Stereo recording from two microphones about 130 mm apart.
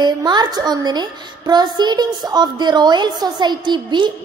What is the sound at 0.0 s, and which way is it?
A child's voice, 35° right (ahead or behind).